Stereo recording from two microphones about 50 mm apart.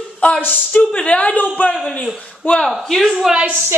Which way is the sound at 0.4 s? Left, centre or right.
Left.